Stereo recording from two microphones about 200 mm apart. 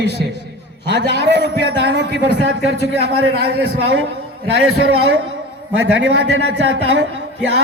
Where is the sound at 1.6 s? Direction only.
55° right (ahead or behind).